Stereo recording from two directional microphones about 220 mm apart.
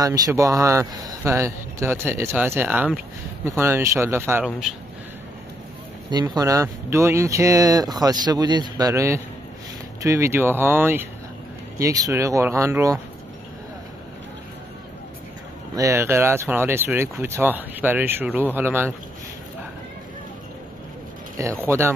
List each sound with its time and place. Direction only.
0.0 s speech: 15° right (ahead or behind)
6.0 s speech: 15° right (ahead or behind)
15.7 s speech: 15° right (ahead or behind)
21.4 s speech: 10° right (ahead or behind)